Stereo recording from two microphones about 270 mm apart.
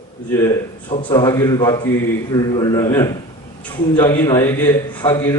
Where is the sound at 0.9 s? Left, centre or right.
Left.